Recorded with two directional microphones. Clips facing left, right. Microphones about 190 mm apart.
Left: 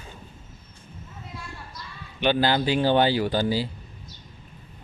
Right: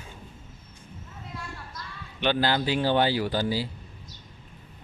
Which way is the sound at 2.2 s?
15° left (ahead or behind).